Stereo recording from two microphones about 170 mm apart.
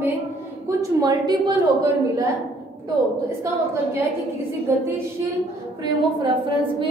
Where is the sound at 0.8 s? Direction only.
20° right (ahead or behind).